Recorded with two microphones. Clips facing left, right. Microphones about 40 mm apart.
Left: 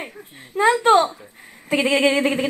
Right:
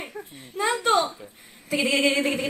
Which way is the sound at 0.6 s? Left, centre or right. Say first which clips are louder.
Left 7 dB; left.